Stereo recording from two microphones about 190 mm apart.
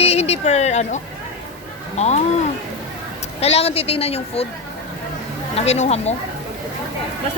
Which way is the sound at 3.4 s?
30° left (ahead or behind).